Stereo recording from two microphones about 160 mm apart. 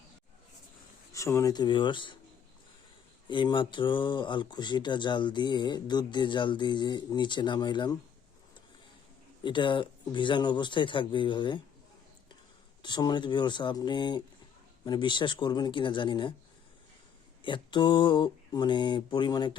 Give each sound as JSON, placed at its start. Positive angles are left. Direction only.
{"t": 1.1, "sound": "speech", "side_deg": 20}
{"t": 3.2, "sound": "speech", "side_deg": 30}
{"t": 9.4, "sound": "speech", "side_deg": 30}
{"t": 12.8, "sound": "speech", "side_deg": 30}
{"t": 17.4, "sound": "speech", "side_deg": 30}